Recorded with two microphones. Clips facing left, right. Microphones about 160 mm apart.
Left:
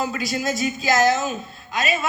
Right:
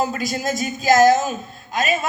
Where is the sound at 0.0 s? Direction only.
45° right (ahead or behind).